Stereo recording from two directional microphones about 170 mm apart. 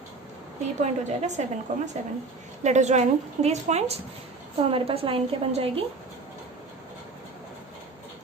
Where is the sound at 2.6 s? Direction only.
45° right (ahead or behind).